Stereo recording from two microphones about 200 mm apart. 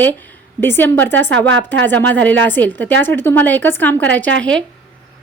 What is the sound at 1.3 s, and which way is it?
Speech, 70° right (ahead or behind).